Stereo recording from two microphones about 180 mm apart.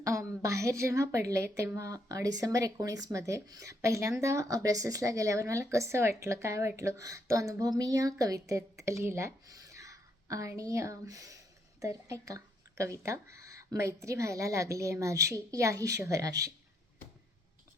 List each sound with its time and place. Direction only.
0.0 s a woman's voice: 15° right (ahead or behind)